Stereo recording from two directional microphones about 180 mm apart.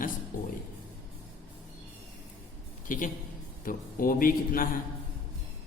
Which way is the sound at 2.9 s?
45° left (ahead or behind).